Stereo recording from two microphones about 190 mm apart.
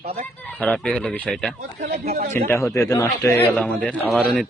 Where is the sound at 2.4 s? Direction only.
15° left (ahead or behind).